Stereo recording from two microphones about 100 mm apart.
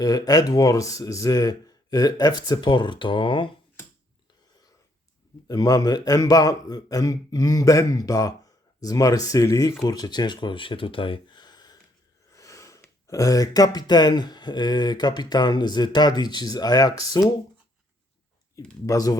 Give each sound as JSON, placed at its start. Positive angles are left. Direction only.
{"t": 0.0, "sound": "speech", "side_deg": 35}
{"t": 5.5, "sound": "speech", "side_deg": 40}
{"t": 12.3, "sound": "speech", "side_deg": 35}
{"t": 18.9, "sound": "speech", "side_deg": 35}